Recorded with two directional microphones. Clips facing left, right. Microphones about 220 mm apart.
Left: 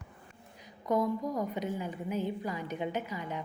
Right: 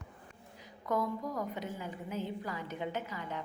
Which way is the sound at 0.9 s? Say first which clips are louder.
Left 4 dB; 15° left (ahead or behind).